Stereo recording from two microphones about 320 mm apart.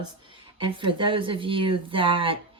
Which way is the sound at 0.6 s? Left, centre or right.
Centre.